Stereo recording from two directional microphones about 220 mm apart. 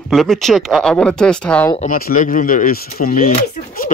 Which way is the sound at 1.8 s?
40° left (ahead or behind).